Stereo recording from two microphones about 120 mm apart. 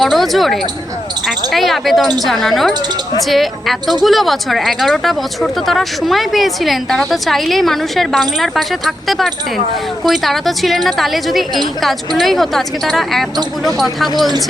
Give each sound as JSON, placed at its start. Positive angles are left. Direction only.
{"t": 0.0, "sound": "speech", "side_deg": 0}